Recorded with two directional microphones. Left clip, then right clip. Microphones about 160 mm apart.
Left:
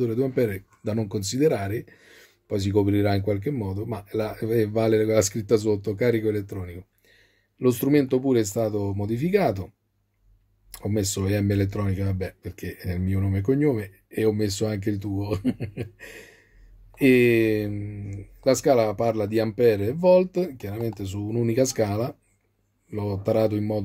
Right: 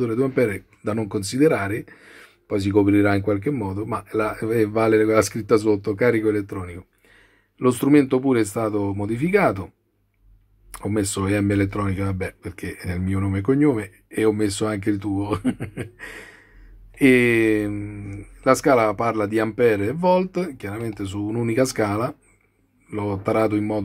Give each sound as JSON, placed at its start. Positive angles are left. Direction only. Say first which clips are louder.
{"t": 0.0, "sound": "speech", "louder": "right 3 dB", "side_deg": 40}
{"t": 10.7, "sound": "speech", "louder": "right 3 dB", "side_deg": 40}